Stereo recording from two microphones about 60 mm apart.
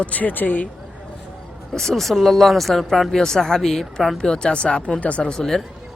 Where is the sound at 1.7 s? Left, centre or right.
Centre.